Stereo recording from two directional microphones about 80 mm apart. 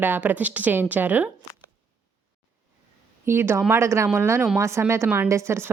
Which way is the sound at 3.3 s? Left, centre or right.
Right.